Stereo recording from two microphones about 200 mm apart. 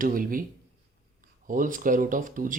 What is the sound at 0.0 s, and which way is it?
Speech, 45° right (ahead or behind).